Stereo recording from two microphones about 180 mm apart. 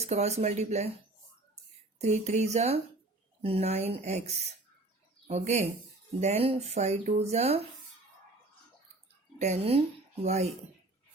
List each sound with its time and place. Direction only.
0.0 s speech: 35° right (ahead or behind)
2.0 s speech: 40° right (ahead or behind)
9.4 s speech: 35° right (ahead or behind)